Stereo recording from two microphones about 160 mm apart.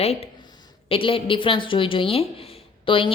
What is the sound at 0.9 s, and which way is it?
A woman's voice, 35° left (ahead or behind).